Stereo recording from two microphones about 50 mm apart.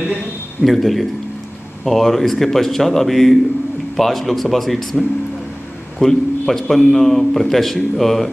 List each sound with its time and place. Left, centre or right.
0.6 s a man's voice: centre